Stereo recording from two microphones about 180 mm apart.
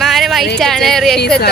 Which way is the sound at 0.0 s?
Centre (ahead or behind).